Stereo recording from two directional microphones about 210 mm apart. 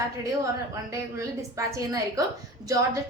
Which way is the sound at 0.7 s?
15° right (ahead or behind).